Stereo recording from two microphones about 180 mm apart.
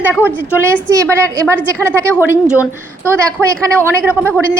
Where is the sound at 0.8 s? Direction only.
15° right (ahead or behind).